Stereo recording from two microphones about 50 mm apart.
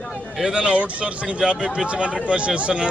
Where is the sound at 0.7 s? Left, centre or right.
Right.